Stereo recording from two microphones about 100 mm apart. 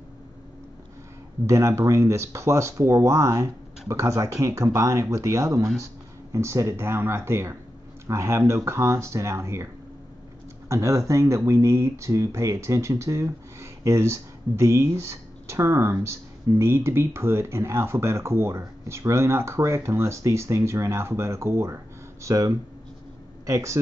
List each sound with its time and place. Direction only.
1.4 s speech: 30° right (ahead or behind)
10.7 s speech: 30° right (ahead or behind)